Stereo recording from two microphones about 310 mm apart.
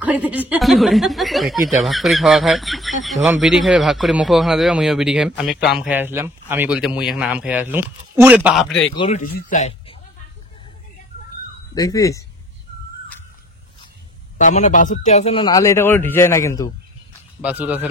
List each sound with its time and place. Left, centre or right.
0.0 s speech: centre
8.9 s speech: centre
11.7 s a man's voice: centre
14.4 s a man's voice: left
17.4 s speech: centre